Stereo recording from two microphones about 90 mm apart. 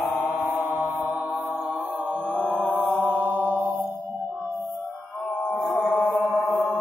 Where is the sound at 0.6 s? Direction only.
20° right (ahead or behind).